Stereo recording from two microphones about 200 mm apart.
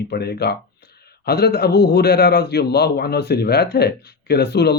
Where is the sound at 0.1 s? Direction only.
55° left (ahead or behind).